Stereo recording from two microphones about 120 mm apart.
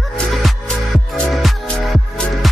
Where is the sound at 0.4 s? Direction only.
Centre (ahead or behind).